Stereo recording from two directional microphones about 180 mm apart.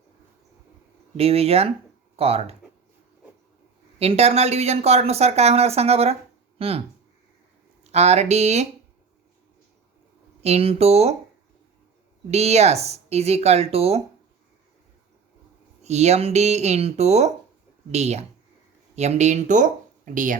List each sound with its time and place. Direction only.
1.1 s speech: 35° right (ahead or behind)
3.9 s speech: 35° right (ahead or behind)
7.9 s speech: 35° right (ahead or behind)
10.4 s speech: 35° right (ahead or behind)
12.3 s speech: 35° right (ahead or behind)
15.8 s speech: 40° right (ahead or behind)